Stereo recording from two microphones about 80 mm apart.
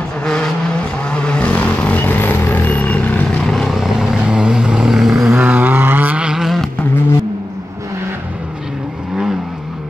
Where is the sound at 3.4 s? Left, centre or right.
Centre.